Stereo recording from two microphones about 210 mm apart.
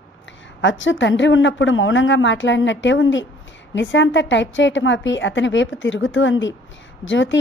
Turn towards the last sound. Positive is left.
turn(degrees=60)  # may be behind; listen again after turning